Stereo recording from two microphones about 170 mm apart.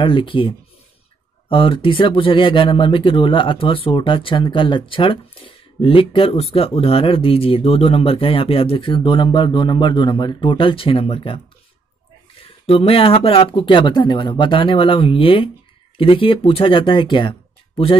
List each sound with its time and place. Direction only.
0.0 s speech: 30° left (ahead or behind)
12.6 s speech: 35° left (ahead or behind)